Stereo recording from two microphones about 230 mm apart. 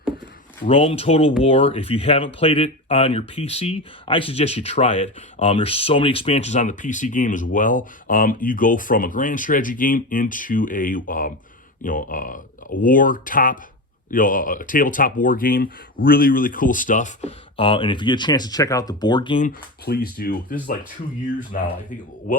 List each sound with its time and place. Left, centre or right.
0.6 s speech: left
19.4 s speech: left